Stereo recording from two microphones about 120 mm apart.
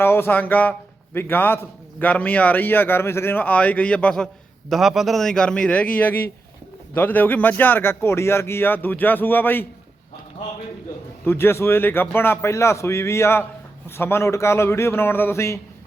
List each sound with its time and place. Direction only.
0.0 s a man's voice: 20° left (ahead or behind)
4.7 s a man's voice: 5° right (ahead or behind); by 9.6 s 15° left (ahead or behind)
11.3 s a man's voice: 20° left (ahead or behind)